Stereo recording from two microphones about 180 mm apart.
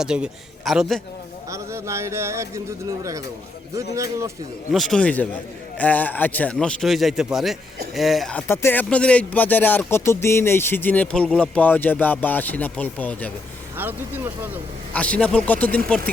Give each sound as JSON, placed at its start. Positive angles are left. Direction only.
{"t": 0.0, "sound": "a man's voice", "side_deg": -5}
{"t": 1.5, "sound": "speech", "side_deg": -15}
{"t": 4.7, "sound": "a man's voice", "side_deg": 0}
{"t": 13.7, "sound": "speech", "side_deg": -10}
{"t": 14.9, "sound": "speech", "side_deg": 5}